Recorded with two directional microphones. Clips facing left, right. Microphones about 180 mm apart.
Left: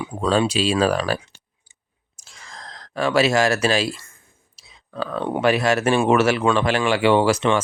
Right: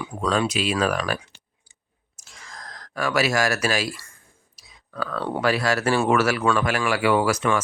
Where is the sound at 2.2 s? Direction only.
30° left (ahead or behind).